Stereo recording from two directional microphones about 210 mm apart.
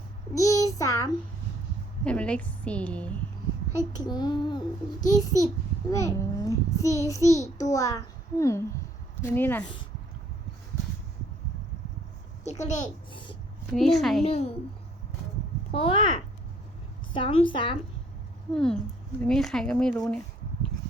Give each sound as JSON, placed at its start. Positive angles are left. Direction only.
{"t": 0.3, "sound": "a sound", "side_deg": 15}
{"t": 2.0, "sound": "a woman's voice", "side_deg": 5}
{"t": 4.0, "sound": "a woman's voice", "side_deg": 20}
{"t": 12.5, "sound": "a child's voice", "side_deg": 35}
{"t": 13.1, "sound": "a woman's voice", "side_deg": 25}
{"t": 13.7, "sound": "a woman's voice", "side_deg": 0}
{"t": 14.3, "sound": "a woman's voice", "side_deg": 30}
{"t": 15.7, "sound": "a woman's voice", "side_deg": 25}
{"t": 18.5, "sound": "a woman's voice", "side_deg": 5}